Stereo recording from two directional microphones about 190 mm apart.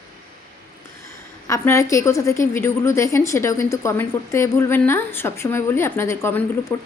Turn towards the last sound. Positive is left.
turn(degrees=15)  # may be behind; listen again after turning